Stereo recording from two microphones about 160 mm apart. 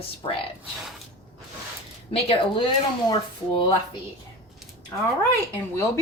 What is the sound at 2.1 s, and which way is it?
Speech, 35° left (ahead or behind).